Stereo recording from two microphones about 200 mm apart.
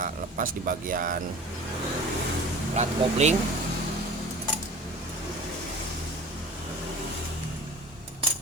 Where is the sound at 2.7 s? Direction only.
35° right (ahead or behind).